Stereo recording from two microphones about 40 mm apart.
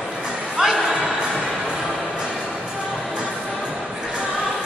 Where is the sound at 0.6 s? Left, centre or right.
Centre.